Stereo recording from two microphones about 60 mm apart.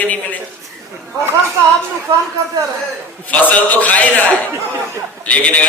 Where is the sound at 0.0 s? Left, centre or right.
Left.